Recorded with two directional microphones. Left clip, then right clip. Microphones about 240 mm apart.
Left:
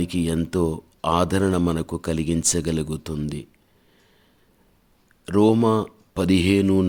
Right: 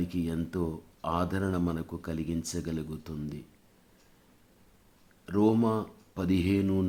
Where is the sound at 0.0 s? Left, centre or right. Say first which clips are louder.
Left 9 dB; left.